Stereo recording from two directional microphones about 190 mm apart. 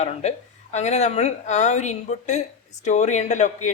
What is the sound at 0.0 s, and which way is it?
Speech, 35° left (ahead or behind).